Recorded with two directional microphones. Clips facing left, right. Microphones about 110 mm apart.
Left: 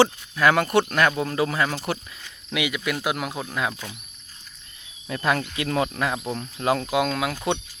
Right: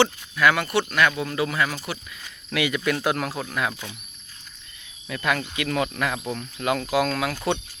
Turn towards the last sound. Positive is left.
turn(degrees=20)  # may be behind; listen again after turning